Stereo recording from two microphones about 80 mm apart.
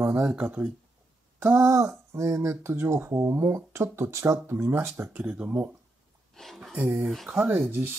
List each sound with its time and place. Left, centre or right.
0.0 s speech: right
1.4 s speech: right
5.1 s speech: centre
6.3 s speech: centre
7.3 s speech: centre